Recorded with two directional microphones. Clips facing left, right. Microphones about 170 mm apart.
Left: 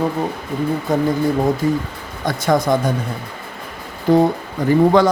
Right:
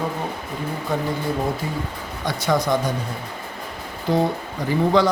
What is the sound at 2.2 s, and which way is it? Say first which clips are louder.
Speech: left 4 dB; 50° left (ahead or behind).